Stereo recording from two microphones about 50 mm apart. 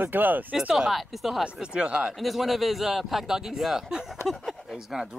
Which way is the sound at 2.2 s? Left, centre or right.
Centre.